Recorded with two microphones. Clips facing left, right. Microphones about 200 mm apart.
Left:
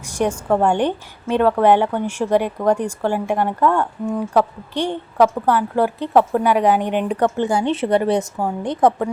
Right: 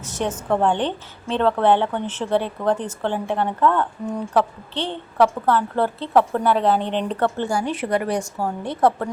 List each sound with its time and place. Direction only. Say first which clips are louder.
0.0 s a woman's voice: left 5 dB; 10° left (ahead or behind)